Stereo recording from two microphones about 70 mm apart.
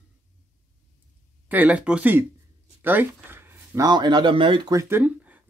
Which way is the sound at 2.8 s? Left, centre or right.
Right.